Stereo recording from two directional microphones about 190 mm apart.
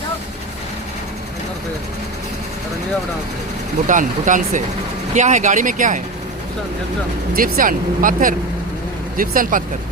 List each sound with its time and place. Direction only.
3.8 s speech: 45° right (ahead or behind)
7.3 s speech: 50° right (ahead or behind)